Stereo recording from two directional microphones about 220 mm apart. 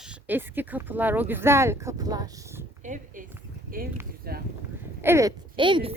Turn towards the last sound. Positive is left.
turn(degrees=-20)  # may be behind; listen again after turning